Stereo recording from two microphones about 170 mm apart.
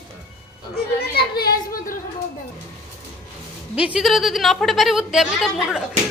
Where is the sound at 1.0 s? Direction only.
65° left (ahead or behind).